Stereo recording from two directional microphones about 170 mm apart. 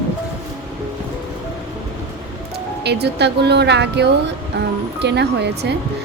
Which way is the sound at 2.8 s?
80° right.